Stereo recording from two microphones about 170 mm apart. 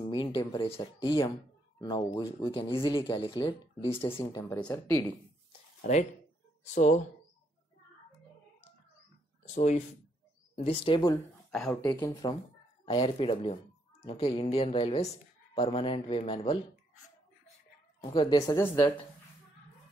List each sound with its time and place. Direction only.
0.0 s speech: 30° left (ahead or behind)
4.2 s speech: 20° left (ahead or behind)
6.6 s speech: 45° left (ahead or behind)
9.5 s speech: 40° left (ahead or behind)
11.5 s speech: centre (ahead or behind)
11.8 s speech: 20° left (ahead or behind); by 16.5 s 35° left (ahead or behind)
18.0 s speech: 25° left (ahead or behind)